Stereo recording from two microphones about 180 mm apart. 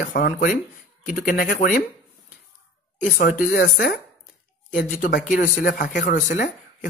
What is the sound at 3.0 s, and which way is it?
Speech, 50° left (ahead or behind).